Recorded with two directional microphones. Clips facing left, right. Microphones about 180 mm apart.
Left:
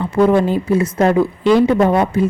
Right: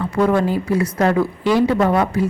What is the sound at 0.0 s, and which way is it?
Speech, 20° left (ahead or behind).